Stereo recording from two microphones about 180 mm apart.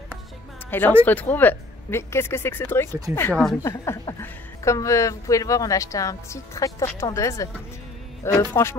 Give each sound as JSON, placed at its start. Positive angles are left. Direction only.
{"t": 0.7, "sound": "a woman's voice", "side_deg": 10}